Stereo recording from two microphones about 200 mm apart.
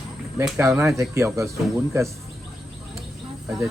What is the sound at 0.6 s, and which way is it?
Speech, 15° right (ahead or behind).